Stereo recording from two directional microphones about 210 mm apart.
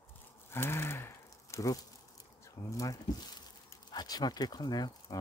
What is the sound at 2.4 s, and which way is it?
Speech, 15° left (ahead or behind).